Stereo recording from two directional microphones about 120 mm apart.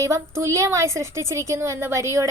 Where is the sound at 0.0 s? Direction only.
25° right (ahead or behind).